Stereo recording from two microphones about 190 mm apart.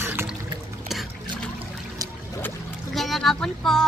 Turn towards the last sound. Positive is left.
turn(degrees=0)  # may be behind; listen again after turning